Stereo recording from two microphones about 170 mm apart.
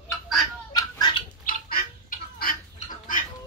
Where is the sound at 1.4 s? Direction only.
60° left (ahead or behind).